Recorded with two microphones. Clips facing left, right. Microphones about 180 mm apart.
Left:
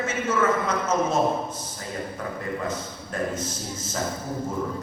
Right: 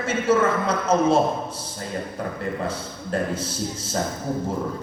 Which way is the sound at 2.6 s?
30° right (ahead or behind).